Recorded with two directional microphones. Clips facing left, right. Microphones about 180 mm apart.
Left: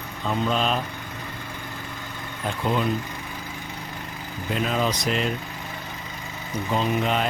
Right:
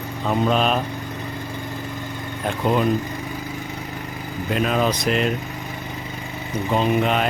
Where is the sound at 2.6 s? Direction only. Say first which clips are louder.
Right 4 dB; 55° right (ahead or behind).